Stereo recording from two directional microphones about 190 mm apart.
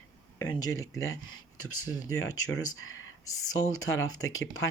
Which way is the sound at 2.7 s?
90° left.